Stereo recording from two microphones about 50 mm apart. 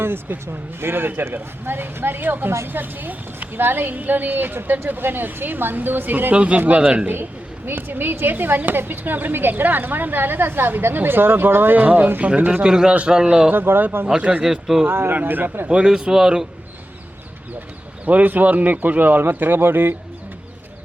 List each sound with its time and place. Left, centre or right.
0.0 s a woman's voice: right
6.3 s speech: right
7.1 s a woman's voice: right
11.8 s a woman's voice: right
12.6 s a man's voice: centre
13.5 s a woman's voice: right
14.1 s speech: right
14.4 s a man's voice: centre
14.8 s a woman's voice: right
15.1 s a woman's voice: right
15.9 s a man's voice: centre
18.0 s a woman's voice: right